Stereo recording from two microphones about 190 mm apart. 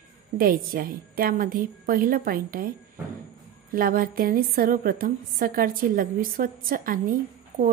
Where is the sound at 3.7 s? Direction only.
50° right (ahead or behind).